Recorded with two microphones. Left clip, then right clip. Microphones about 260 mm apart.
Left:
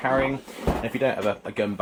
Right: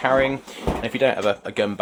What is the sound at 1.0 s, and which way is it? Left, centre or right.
Speech, right.